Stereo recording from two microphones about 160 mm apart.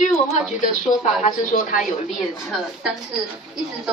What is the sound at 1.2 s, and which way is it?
Speech, 60° left (ahead or behind).